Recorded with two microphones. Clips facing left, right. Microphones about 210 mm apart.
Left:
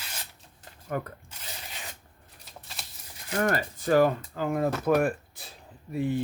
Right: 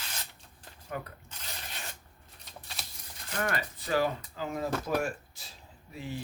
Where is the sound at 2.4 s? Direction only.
Centre (ahead or behind).